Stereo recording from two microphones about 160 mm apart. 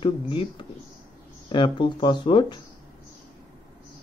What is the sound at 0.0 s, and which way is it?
Speech, 30° left (ahead or behind).